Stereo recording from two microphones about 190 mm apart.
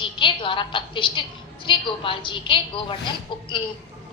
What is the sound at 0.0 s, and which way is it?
A woman's voice, 25° left (ahead or behind).